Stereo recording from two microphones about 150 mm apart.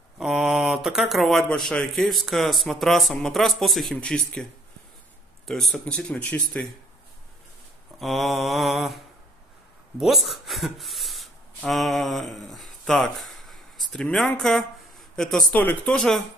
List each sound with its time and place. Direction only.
0.2 s speech: 5° right (ahead or behind)
5.5 s speech: centre (ahead or behind)
8.0 s speech: centre (ahead or behind)